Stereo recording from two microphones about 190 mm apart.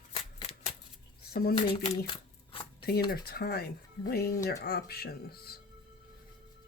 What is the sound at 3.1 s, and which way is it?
Speech, 55° left (ahead or behind).